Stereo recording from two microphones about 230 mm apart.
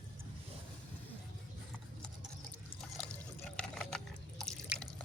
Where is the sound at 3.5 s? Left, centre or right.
Centre.